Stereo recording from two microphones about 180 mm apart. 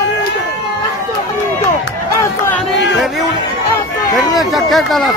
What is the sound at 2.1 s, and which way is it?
Crowd, 15° left (ahead or behind).